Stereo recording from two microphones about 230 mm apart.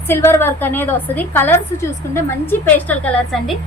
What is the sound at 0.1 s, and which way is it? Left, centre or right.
A woman's voice, centre.